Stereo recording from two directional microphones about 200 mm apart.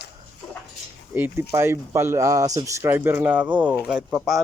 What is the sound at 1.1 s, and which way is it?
Speech, 10° right (ahead or behind).